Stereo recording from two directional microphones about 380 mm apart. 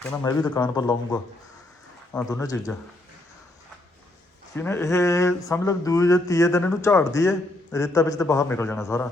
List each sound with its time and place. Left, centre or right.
0.0 s speech: centre
4.5 s speech: centre